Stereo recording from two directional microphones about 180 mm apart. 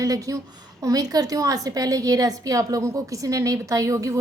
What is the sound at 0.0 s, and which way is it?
A woman's voice, 20° right (ahead or behind).